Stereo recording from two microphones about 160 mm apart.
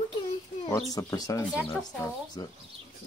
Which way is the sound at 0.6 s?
20° left (ahead or behind).